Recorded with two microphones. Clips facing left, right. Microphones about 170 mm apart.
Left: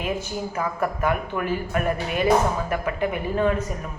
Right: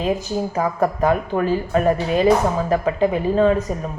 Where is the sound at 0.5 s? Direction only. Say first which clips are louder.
Right 5 dB; 35° right (ahead or behind).